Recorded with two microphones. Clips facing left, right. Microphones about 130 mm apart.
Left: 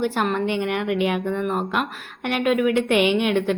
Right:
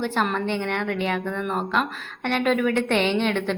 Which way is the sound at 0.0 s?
10° left (ahead or behind).